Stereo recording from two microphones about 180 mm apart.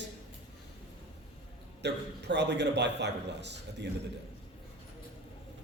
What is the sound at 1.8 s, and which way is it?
A man's voice, 70° right (ahead or behind).